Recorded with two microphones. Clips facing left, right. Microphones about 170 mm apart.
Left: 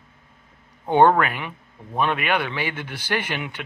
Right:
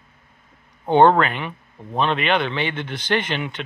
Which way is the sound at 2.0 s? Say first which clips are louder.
Right 2 dB; 10° left (ahead or behind).